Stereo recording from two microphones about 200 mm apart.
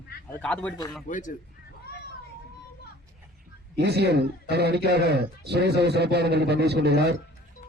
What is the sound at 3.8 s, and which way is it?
Speech, 55° right (ahead or behind).